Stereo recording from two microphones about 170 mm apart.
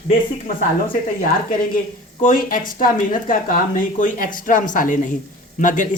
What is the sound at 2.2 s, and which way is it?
Speech, 50° left (ahead or behind).